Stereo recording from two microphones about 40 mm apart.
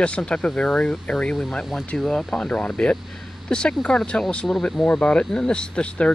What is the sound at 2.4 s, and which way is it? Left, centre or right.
Speech, left.